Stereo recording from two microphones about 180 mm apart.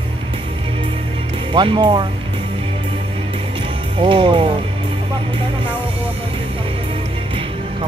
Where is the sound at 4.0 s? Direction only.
30° right (ahead or behind).